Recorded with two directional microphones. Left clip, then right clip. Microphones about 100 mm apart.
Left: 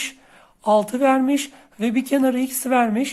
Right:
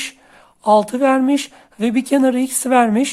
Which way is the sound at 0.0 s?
35° right (ahead or behind).